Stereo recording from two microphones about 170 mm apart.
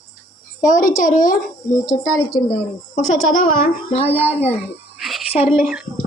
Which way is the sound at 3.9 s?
35° left (ahead or behind).